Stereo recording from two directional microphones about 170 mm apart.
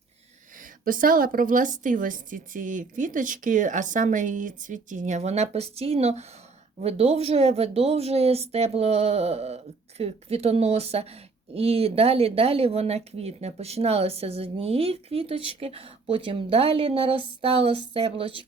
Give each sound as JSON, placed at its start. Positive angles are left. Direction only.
{"t": 0.6, "sound": "a woman's voice", "side_deg": -55}